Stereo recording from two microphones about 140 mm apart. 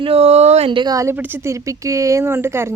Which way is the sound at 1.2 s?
15° right (ahead or behind).